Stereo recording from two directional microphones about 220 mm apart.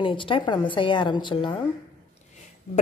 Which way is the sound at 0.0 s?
25° left (ahead or behind).